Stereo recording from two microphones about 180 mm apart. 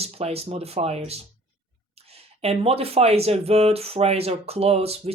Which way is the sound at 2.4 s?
35° right (ahead or behind).